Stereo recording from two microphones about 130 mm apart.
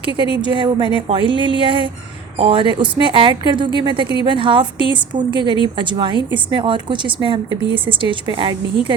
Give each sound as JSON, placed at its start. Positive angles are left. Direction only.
{"t": 0.0, "sound": "a woman's voice", "side_deg": -40}